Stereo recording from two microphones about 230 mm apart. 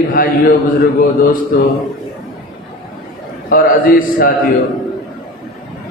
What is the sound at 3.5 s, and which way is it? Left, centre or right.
Speech, left.